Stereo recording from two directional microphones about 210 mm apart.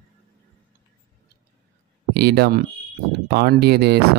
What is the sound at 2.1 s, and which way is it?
Speech, 50° right (ahead or behind).